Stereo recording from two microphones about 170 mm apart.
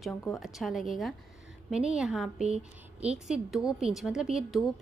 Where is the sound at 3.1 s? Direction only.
Centre (ahead or behind).